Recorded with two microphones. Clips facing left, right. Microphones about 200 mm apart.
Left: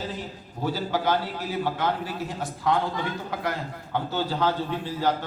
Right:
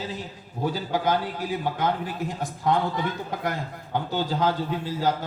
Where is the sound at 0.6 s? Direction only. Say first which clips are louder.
Right 1 dB; 15° right (ahead or behind).